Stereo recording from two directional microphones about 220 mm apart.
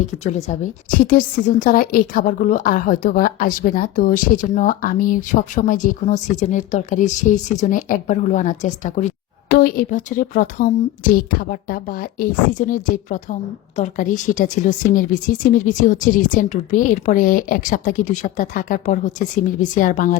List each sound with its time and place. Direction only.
0.3 s a woman's voice: 35° left (ahead or behind)